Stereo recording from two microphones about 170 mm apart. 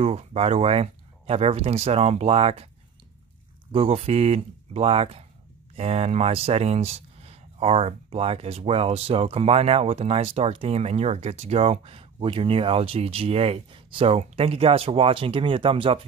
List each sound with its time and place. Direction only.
0.0 s speech: 35° right (ahead or behind)
3.7 s speech: 35° right (ahead or behind)